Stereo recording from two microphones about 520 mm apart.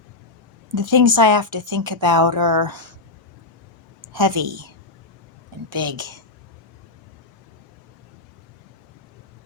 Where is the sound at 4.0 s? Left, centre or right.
Right.